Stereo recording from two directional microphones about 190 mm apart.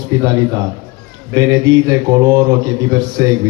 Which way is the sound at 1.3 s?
20° right (ahead or behind).